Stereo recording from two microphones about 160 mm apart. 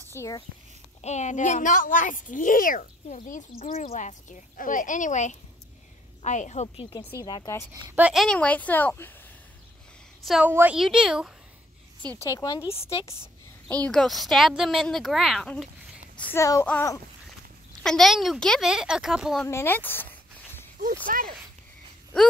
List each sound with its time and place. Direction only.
0.1 s speech: 20° left (ahead or behind)
1.0 s speech: 45° left (ahead or behind)
7.2 s speech: 20° left (ahead or behind)
7.7 s speech: 10° right (ahead or behind); by 9.1 s 10° left (ahead or behind)
10.2 s a woman's voice: centre (ahead or behind)
12.2 s a woman's voice: 20° left (ahead or behind); by 15.7 s 5° left (ahead or behind)
16.2 s speech: 15° left (ahead or behind)
17.8 s a woman's voice: centre (ahead or behind)
19.4 s speech: 15° left (ahead or behind)
21.1 s speech: 60° right (ahead or behind)